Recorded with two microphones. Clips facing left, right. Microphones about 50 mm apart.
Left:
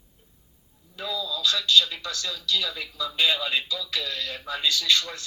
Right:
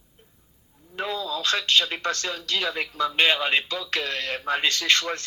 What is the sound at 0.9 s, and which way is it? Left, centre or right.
Speech, right.